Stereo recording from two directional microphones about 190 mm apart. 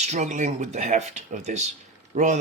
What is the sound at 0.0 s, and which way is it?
Speech, 35° right (ahead or behind).